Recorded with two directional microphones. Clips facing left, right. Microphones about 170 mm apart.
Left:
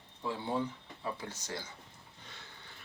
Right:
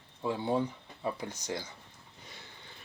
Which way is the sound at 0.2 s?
20° right (ahead or behind).